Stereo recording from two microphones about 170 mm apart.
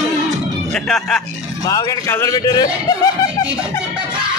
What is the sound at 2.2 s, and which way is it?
Speech, 20° left (ahead or behind).